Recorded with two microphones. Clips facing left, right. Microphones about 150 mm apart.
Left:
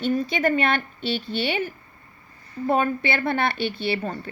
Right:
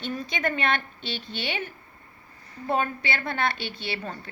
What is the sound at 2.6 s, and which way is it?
A woman's voice, 50° left (ahead or behind).